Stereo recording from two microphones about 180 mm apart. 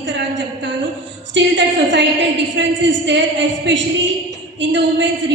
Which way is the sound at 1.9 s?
90° right.